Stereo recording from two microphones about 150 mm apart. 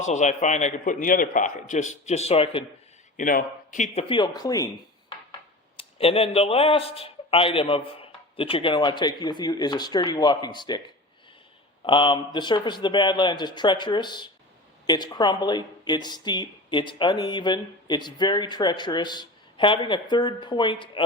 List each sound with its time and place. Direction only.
0.0 s a man's voice: 50° left (ahead or behind)
3.2 s a man's voice: 65° left (ahead or behind)
3.9 s speech: 30° left (ahead or behind)
5.7 s speech: 40° left (ahead or behind)
11.9 s speech: 35° left (ahead or behind)